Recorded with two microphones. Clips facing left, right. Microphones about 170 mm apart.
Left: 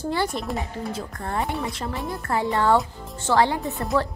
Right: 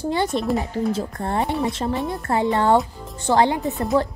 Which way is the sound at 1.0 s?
25° right (ahead or behind).